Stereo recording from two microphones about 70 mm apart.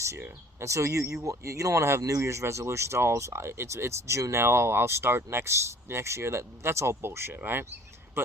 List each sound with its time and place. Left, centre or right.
0.6 s speech: right